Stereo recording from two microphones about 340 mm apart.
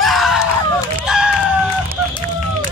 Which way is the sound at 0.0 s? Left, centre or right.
Centre.